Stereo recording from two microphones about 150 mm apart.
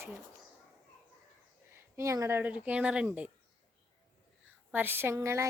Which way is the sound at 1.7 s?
20° right (ahead or behind).